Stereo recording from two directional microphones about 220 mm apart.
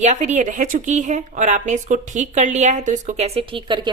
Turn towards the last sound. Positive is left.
turn(degrees=-20)  # may be behind; listen again after turning